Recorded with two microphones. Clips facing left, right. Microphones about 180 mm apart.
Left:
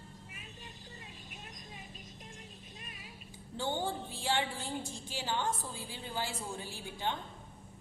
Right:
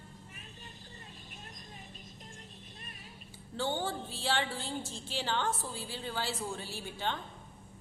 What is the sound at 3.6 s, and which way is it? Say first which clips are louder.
A woman's voice: right 1 dB; 15° left (ahead or behind).